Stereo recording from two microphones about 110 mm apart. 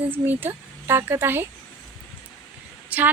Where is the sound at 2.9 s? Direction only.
15° right (ahead or behind).